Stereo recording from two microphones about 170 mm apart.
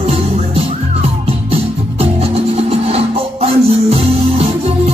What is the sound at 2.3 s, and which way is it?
Music, 35° right (ahead or behind).